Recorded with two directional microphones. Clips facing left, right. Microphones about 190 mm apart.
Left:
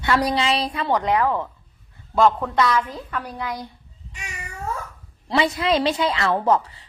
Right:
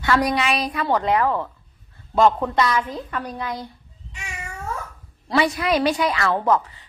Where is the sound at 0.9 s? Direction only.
15° left (ahead or behind).